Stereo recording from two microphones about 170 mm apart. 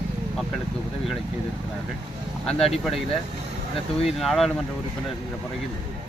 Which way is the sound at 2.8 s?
Centre (ahead or behind).